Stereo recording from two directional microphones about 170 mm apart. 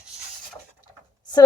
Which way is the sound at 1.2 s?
25° left (ahead or behind).